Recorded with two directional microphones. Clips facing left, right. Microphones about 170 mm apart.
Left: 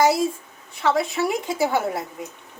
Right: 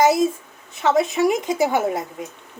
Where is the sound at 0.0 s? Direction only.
20° right (ahead or behind).